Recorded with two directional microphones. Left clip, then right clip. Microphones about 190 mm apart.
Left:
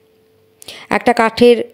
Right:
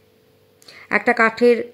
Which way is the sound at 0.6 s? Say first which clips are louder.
Left 4 dB; 35° left (ahead or behind).